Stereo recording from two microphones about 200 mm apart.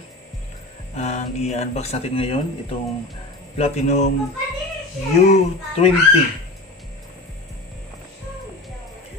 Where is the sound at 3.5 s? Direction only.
35° left (ahead or behind).